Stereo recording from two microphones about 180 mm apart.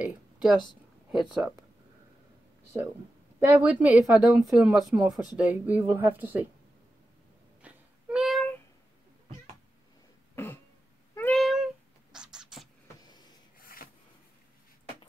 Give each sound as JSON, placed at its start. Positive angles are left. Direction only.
{"t": 0.0, "sound": "speech", "side_deg": -5}
{"t": 3.4, "sound": "speech", "side_deg": -10}
{"t": 7.6, "sound": "a sound", "side_deg": -5}
{"t": 10.3, "sound": "throat clearing", "side_deg": 10}
{"t": 11.1, "sound": "cat", "side_deg": 5}
{"t": 13.0, "sound": "gasp", "side_deg": 20}
{"t": 13.6, "sound": "a sound", "side_deg": 55}